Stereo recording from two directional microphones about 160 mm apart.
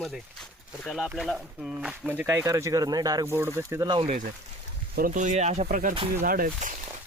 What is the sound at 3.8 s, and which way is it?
Speech, 30° right (ahead or behind).